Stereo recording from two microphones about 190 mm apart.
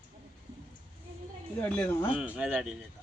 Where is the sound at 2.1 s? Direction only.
5° right (ahead or behind).